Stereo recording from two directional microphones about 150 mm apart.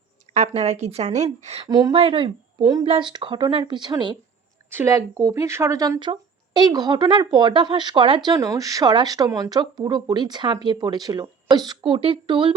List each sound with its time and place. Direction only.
0.3 s a woman's voice: 45° right (ahead or behind)
1.6 s a woman's voice: 25° right (ahead or behind)